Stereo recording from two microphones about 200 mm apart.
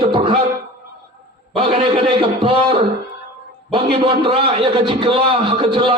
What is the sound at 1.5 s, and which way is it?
A man's voice, 30° right (ahead or behind).